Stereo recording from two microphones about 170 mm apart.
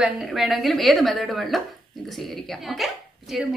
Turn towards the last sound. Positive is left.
turn(degrees=0)  # may be behind; listen again after turning